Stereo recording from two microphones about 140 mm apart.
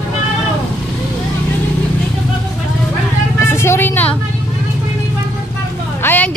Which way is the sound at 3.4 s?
15° left (ahead or behind).